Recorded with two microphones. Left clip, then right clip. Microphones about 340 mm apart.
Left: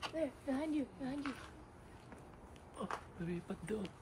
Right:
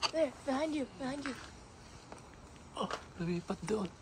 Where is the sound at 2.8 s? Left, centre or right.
Centre.